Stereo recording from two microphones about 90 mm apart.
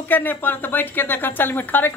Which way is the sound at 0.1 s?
20° left (ahead or behind).